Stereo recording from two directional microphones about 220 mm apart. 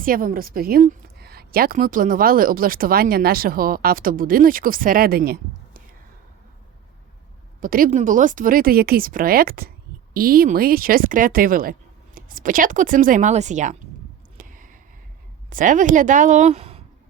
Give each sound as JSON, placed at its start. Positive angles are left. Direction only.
{"t": 0.0, "sound": "a woman's voice", "side_deg": -40}
{"t": 7.6, "sound": "a woman's voice", "side_deg": -40}
{"t": 14.3, "sound": "a sound", "side_deg": -40}
{"t": 15.4, "sound": "speech", "side_deg": -35}